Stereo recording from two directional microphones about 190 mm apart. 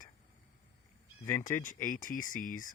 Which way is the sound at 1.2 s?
20° left (ahead or behind).